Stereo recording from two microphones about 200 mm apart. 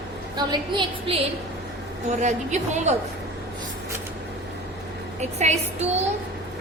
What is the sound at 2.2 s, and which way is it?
Speech, 35° right (ahead or behind).